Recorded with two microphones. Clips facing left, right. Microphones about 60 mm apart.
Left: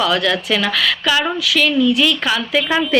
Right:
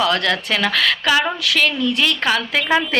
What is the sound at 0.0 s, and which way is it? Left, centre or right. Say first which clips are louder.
Speech: left 1 dB; right.